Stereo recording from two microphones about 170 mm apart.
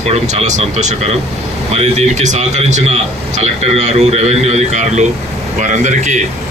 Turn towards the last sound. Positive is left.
turn(degrees=-45)  # may be behind; listen again after turning